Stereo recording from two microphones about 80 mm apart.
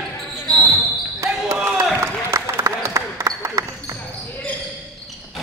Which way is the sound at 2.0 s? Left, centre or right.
Right.